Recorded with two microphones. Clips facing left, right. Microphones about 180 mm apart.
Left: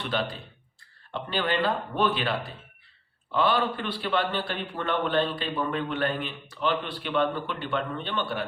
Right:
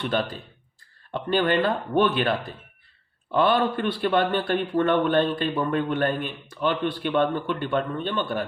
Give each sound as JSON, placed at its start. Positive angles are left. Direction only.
{"t": 0.1, "sound": "speech", "side_deg": -50}
{"t": 3.3, "sound": "speech", "side_deg": -50}